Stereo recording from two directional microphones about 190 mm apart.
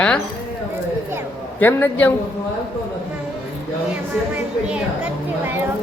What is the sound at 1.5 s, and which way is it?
Speech, 10° left (ahead or behind).